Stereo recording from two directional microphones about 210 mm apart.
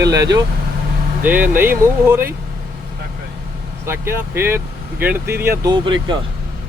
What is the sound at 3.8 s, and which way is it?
Speech, 10° right (ahead or behind).